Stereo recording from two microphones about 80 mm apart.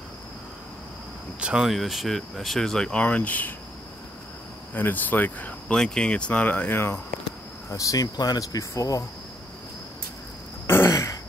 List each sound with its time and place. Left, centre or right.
1.4 s speech: centre; by 3.5 s left
4.7 s speech: left
5.7 s speech: centre; by 7.0 s left
7.7 s speech: left
10.7 s throat clearing: left